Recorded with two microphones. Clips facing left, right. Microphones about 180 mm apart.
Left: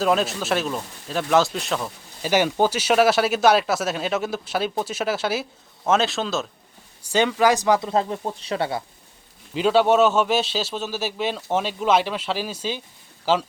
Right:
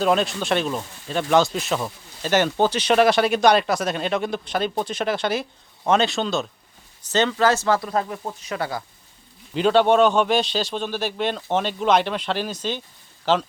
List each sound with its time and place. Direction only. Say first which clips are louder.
0.0 s speech: right 1 dB; centre (ahead or behind)
2.2 s speech: even; 10° left (ahead or behind)
7.0 s speech: left 1 dB; 10° left (ahead or behind); by 8.8 s 25° left (ahead or behind)
9.6 s speech: right 1 dB; 5° left (ahead or behind)